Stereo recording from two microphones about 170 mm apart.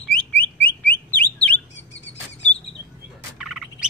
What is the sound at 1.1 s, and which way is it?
Bird, 10° left (ahead or behind).